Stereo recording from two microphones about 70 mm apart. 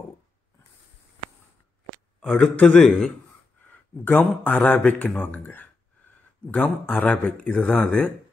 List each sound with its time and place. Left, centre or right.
2.1 s speech: centre
3.6 s speech: left